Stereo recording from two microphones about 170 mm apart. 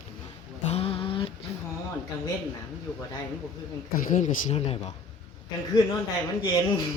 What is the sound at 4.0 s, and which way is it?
Speech, 50° left (ahead or behind).